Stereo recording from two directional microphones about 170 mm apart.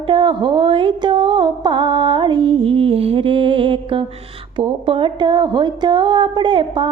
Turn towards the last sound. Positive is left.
turn(degrees=-30)  # may be behind; listen again after turning